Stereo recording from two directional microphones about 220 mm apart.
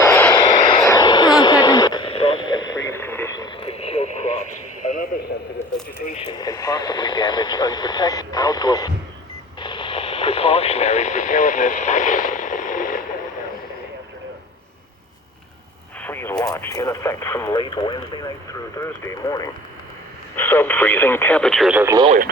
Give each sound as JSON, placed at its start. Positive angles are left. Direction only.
{"t": 0.0, "sound": "vehicle", "side_deg": 10}
{"t": 0.9, "sound": "radio", "side_deg": 20}
{"t": 6.2, "sound": "radio", "side_deg": 15}
{"t": 16.0, "sound": "radio", "side_deg": 10}